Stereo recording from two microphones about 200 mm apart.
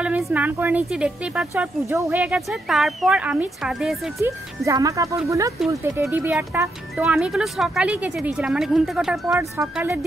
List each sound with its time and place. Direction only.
0.0 s speech: 5° right (ahead or behind)
4.2 s speech: 15° right (ahead or behind)
9.4 s speech: 15° right (ahead or behind)